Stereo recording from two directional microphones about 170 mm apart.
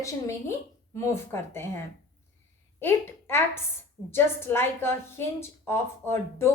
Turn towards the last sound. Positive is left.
turn(degrees=15)  # may be behind; listen again after turning